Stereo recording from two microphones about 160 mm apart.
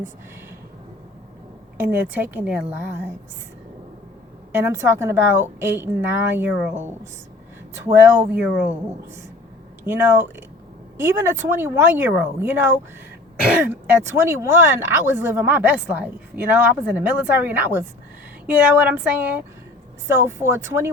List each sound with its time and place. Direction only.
1.8 s speech: 15° right (ahead or behind)
4.5 s speech: 15° right (ahead or behind)
9.8 s speech: 15° right (ahead or behind)